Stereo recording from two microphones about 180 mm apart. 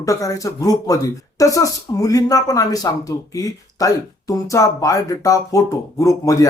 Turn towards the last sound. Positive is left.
turn(degrees=20)  # may be behind; listen again after turning